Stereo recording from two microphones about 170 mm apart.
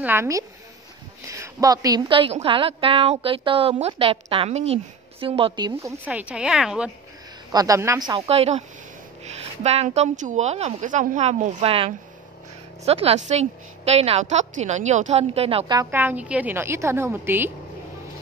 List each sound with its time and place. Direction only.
0.0 s a woman's voice: 15° right (ahead or behind); by 5.7 s 35° right (ahead or behind)
5.8 s a woman's voice: 15° right (ahead or behind)
7.5 s a woman's voice: 20° right (ahead or behind)
8.3 s a woman's voice: 40° right (ahead or behind)
15.8 s a woman's voice: 10° right (ahead or behind)